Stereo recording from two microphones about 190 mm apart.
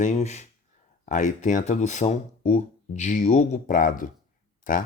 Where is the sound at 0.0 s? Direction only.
40° left (ahead or behind).